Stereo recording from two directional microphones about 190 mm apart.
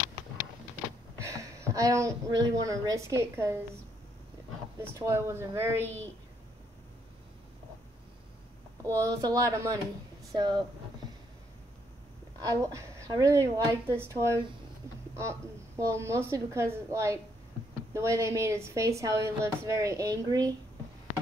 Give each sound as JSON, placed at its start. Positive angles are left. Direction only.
{"t": 1.2, "sound": "a sound", "side_deg": -15}
{"t": 2.4, "sound": "a woman's voice", "side_deg": -20}
{"t": 4.7, "sound": "a woman's voice", "side_deg": -15}
{"t": 8.8, "sound": "a woman's voice", "side_deg": -20}
{"t": 12.4, "sound": "a woman's voice", "side_deg": -20}